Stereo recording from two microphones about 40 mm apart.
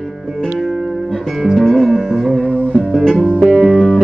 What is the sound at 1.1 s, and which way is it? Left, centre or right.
Music, centre.